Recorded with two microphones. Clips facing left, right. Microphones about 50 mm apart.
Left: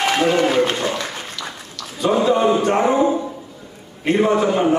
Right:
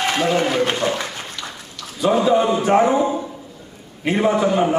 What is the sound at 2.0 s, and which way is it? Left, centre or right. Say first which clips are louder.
A man's voice: right 1 dB; centre.